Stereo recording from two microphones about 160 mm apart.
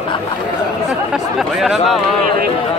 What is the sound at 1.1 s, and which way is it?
Speech, 5° right (ahead or behind).